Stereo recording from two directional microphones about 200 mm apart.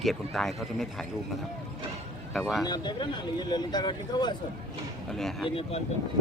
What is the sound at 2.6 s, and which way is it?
Speech, 20° left (ahead or behind).